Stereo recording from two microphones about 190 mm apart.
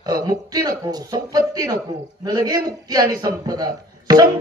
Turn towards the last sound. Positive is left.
turn(degrees=-20)  # may be behind; listen again after turning